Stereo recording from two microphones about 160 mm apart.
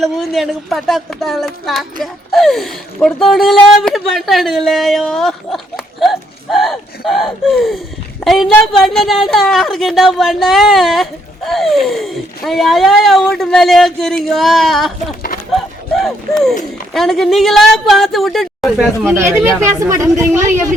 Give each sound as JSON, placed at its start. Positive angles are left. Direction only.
{"t": 0.0, "sound": "speech", "side_deg": 0}
{"t": 19.0, "sound": "a woman's voice", "side_deg": -15}